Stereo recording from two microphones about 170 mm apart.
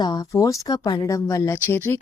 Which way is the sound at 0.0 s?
25° left (ahead or behind).